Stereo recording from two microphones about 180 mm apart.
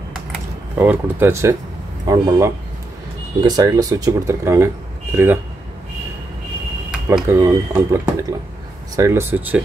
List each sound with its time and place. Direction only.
0.3 s speech: 10° right (ahead or behind)
6.9 s speech: 10° right (ahead or behind)